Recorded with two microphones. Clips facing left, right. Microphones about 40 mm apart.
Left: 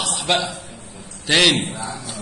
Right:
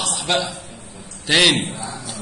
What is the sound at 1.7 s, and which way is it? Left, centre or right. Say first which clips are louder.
Speech: left 1 dB; left.